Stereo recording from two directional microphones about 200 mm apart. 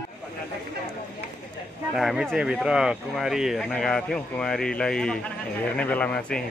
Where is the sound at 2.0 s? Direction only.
Centre (ahead or behind).